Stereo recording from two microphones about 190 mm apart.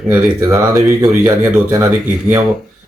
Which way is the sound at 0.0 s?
10° right (ahead or behind).